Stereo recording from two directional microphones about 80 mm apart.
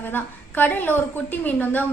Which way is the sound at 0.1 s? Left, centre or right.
Left.